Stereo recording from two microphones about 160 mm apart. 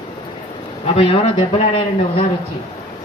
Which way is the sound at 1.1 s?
40° left (ahead or behind).